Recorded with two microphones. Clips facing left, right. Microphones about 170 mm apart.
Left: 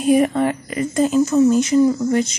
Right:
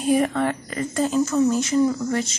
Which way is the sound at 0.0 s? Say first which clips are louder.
Left 4 dB; 15° left (ahead or behind).